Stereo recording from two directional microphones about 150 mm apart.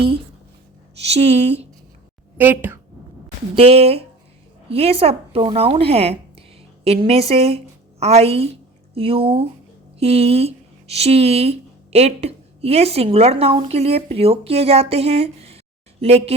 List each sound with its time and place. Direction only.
1.0 s speech: 45° right (ahead or behind)
2.4 s speech: 15° right (ahead or behind)
3.5 s a woman's voice: 40° right (ahead or behind)